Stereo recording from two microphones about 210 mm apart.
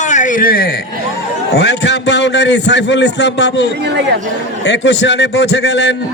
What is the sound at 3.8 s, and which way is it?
Speech, 55° right (ahead or behind).